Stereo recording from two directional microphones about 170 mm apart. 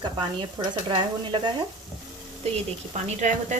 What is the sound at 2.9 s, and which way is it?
Speech, 45° right (ahead or behind).